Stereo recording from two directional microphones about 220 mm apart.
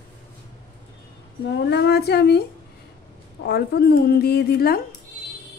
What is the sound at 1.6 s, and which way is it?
Speech, 50° left (ahead or behind).